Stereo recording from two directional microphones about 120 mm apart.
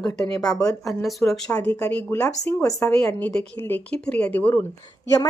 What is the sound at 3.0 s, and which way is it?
A woman's voice, 15° left (ahead or behind).